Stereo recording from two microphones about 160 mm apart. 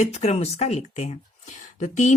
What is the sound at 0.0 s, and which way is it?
Speech, 45° left (ahead or behind).